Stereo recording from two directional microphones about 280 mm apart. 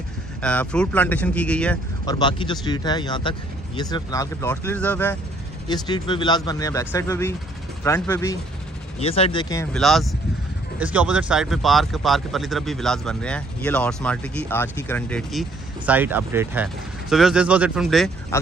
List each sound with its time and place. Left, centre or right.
0.4 s speech: centre
9.8 s speech: centre